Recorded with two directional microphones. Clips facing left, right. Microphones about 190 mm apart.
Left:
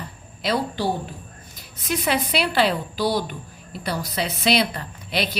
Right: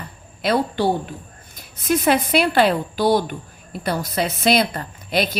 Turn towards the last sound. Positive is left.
turn(degrees=-45)  # may be behind; listen again after turning